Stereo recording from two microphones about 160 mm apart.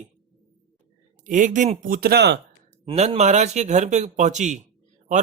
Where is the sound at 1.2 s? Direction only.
55° right (ahead or behind); by 2.3 s 85° right.